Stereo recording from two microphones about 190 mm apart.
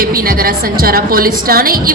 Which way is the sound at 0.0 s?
50° right (ahead or behind).